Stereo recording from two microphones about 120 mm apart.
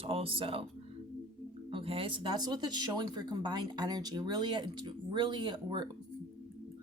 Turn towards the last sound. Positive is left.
turn(degrees=-40)  # may be behind; listen again after turning